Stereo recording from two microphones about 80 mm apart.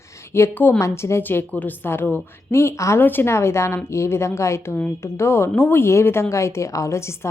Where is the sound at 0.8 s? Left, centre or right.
Left.